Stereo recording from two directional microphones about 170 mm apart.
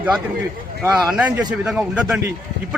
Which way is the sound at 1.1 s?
10° right (ahead or behind).